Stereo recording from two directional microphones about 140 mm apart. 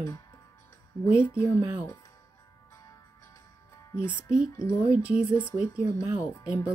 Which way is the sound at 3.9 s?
20° left (ahead or behind).